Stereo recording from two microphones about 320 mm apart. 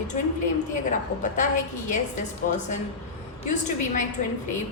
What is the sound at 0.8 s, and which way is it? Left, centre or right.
A woman's voice, left.